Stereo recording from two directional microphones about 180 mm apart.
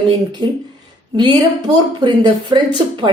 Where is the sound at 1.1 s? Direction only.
25° right (ahead or behind).